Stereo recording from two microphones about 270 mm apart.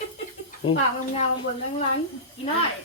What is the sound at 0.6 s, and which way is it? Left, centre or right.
Speech, centre.